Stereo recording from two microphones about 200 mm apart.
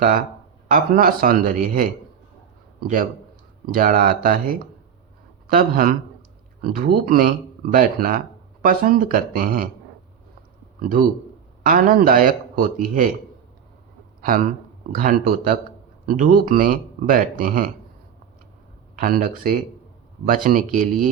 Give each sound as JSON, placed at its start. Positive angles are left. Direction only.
{"t": 0.7, "sound": "speech", "side_deg": -45}
{"t": 3.7, "sound": "speech", "side_deg": -45}
{"t": 10.8, "sound": "a man's voice", "side_deg": -45}
{"t": 14.2, "sound": "speech", "side_deg": -45}
{"t": 18.9, "sound": "speech", "side_deg": -45}